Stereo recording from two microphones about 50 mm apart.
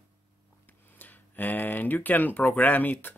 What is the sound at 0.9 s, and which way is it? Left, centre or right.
Speech, left.